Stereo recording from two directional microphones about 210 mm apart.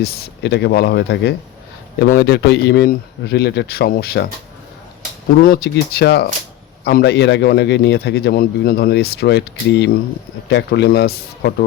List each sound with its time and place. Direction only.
0.0 s a man's voice: 55° left (ahead or behind)
5.4 s a man's voice: 45° left (ahead or behind)